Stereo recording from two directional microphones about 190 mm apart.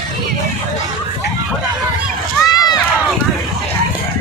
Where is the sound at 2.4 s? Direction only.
20° left (ahead or behind).